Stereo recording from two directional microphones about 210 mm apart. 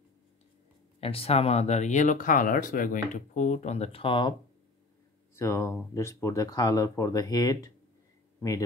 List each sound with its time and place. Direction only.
1.0 s speech: 30° left (ahead or behind)
5.3 s speech: 15° left (ahead or behind)